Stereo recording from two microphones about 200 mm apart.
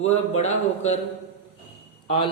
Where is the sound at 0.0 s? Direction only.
35° left (ahead or behind).